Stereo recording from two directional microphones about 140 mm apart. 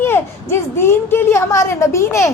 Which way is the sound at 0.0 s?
15° left (ahead or behind).